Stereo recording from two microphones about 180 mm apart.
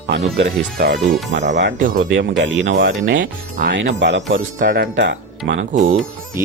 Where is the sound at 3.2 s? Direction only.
50° right (ahead or behind).